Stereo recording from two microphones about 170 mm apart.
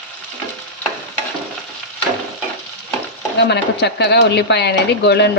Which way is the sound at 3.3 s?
85° left.